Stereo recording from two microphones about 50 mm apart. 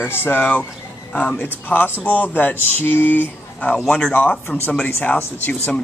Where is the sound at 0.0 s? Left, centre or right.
Left.